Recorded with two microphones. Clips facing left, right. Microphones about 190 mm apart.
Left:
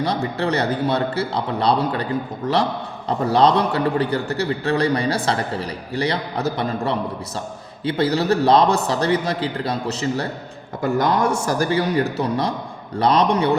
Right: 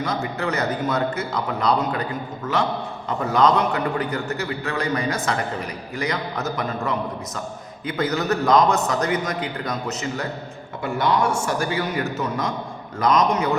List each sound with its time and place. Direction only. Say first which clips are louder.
0.0 s a man's voice: left 3 dB; 35° left (ahead or behind)